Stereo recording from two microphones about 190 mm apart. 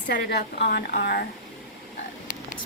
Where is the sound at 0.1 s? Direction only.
60° left (ahead or behind).